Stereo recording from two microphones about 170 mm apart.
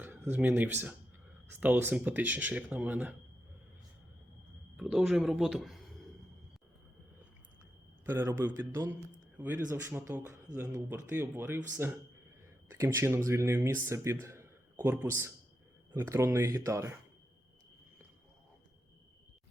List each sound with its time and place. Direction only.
0.0 s speech: 10° right (ahead or behind)
4.8 s speech: centre (ahead or behind)
8.0 s speech: 10° right (ahead or behind)